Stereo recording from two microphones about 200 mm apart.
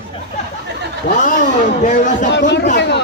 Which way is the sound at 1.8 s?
40° left (ahead or behind).